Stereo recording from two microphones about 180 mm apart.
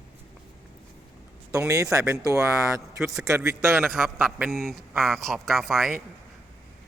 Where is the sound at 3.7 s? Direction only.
Centre (ahead or behind).